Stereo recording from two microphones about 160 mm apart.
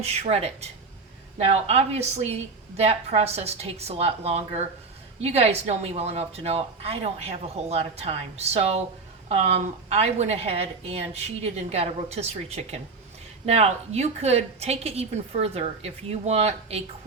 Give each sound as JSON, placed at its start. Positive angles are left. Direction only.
{"t": 0.0, "sound": "a woman's voice", "side_deg": -40}